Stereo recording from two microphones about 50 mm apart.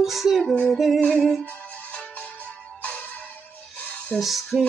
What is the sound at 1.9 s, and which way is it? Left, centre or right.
Music, left.